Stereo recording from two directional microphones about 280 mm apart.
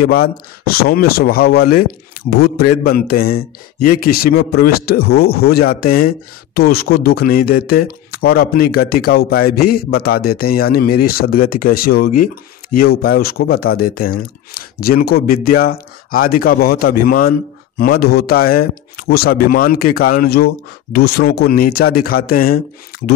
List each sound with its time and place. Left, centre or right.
0.0 s speech: left